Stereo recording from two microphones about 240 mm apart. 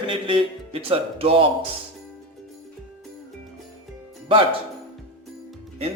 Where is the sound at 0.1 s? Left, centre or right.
Right.